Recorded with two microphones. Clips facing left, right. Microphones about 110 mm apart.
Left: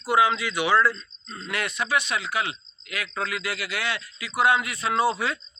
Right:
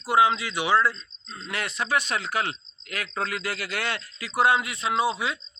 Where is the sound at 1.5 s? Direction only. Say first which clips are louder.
Left 1 dB; 30° right (ahead or behind).